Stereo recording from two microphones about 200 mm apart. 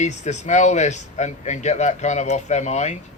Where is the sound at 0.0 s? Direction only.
35° left (ahead or behind).